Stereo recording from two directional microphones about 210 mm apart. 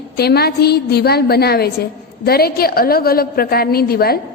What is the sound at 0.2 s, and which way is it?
A woman's voice, 50° left (ahead or behind).